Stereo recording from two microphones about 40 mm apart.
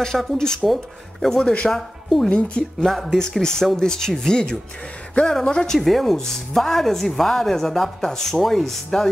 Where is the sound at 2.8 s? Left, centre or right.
Centre.